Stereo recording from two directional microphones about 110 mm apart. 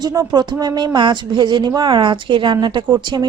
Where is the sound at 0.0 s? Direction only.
35° right (ahead or behind).